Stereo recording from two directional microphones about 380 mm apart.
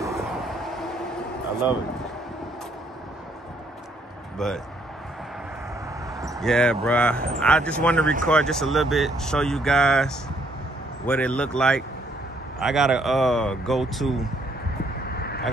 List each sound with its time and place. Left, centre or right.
0.0 s vehicle: centre
4.4 s speech: centre
6.2 s basketball bounce: centre
6.5 s speech: centre
15.0 s a sound: left